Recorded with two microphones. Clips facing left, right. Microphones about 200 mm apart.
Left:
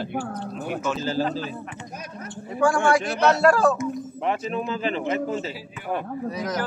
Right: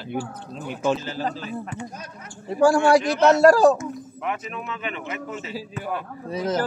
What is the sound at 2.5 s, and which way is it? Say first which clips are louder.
A man's voice: right 4 dB; 35° right (ahead or behind).